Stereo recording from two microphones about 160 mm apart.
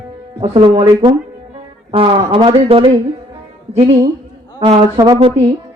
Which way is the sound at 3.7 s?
40° right (ahead or behind).